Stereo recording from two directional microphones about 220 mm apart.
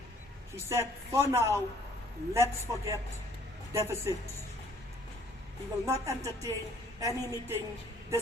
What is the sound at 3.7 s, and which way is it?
Speech, 10° right (ahead or behind).